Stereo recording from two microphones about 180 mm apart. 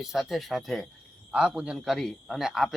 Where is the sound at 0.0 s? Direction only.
Centre (ahead or behind).